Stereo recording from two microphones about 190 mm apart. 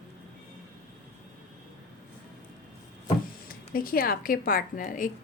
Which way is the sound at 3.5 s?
50° left (ahead or behind).